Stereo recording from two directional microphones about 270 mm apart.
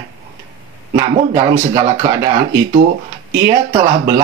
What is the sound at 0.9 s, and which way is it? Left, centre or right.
Speech, centre.